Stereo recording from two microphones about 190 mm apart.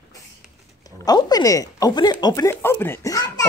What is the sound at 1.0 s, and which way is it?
Speech, 20° left (ahead or behind).